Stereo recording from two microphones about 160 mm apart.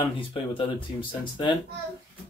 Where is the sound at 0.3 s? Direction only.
30° left (ahead or behind).